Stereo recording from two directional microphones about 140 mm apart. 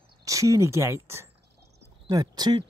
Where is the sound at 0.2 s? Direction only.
25° right (ahead or behind).